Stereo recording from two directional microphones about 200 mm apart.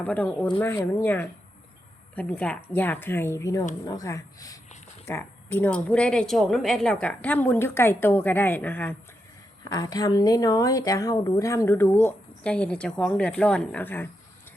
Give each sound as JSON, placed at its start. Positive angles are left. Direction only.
{"t": 0.0, "sound": "speech", "side_deg": 10}
{"t": 9.6, "sound": "speech", "side_deg": 20}